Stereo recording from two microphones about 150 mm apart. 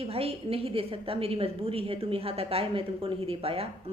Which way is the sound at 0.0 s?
40° right (ahead or behind).